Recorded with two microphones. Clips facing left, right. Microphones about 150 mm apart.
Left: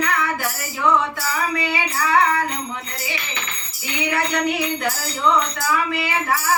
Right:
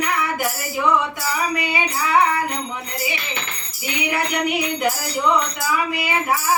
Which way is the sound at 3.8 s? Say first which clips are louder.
Even; 15° right (ahead or behind).